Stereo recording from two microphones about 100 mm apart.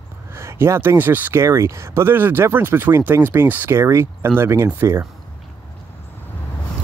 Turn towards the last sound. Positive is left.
turn(degrees=-25)  # may be behind; listen again after turning